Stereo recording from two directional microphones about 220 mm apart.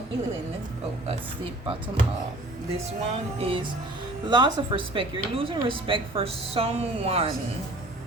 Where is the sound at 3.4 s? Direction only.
25° right (ahead or behind).